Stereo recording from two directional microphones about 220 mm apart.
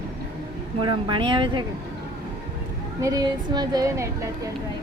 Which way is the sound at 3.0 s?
15° right (ahead or behind).